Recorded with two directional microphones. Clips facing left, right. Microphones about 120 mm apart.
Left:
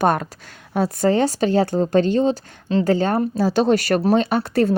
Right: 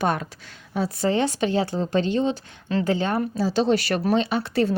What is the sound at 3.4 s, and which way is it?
Speech, 55° left (ahead or behind).